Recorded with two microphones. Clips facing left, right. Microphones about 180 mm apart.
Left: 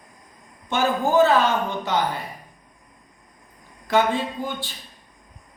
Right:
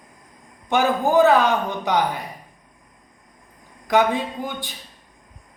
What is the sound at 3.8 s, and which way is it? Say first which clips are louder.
Speech: right 2 dB; 15° right (ahead or behind).